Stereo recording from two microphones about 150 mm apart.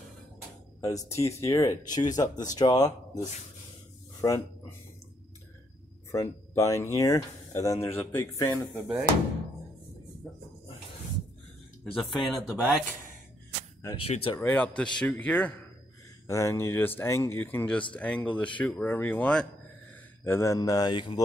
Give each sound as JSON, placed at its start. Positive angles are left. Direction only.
{"t": 0.7, "sound": "speech", "side_deg": 20}
{"t": 6.1, "sound": "speech", "side_deg": 20}
{"t": 8.6, "sound": "speech", "side_deg": -5}
{"t": 10.3, "sound": "speech", "side_deg": 0}
{"t": 11.8, "sound": "speech", "side_deg": 0}
{"t": 13.9, "sound": "speech", "side_deg": 40}
{"t": 14.4, "sound": "speech", "side_deg": 10}